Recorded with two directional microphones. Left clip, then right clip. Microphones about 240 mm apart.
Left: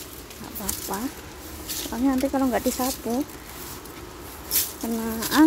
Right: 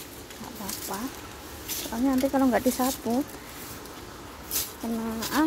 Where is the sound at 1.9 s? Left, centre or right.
Centre.